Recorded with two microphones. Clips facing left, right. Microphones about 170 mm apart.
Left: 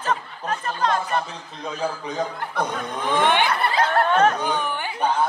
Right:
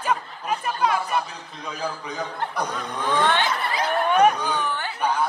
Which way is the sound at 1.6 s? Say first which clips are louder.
Left 3 dB; 30° left (ahead or behind).